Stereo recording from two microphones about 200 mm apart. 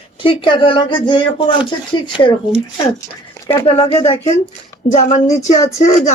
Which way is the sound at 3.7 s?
25° left (ahead or behind).